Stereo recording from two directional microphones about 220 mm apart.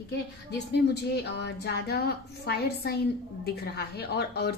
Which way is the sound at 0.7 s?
50° left (ahead or behind).